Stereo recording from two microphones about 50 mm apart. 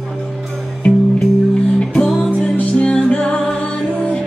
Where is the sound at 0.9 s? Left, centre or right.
Left.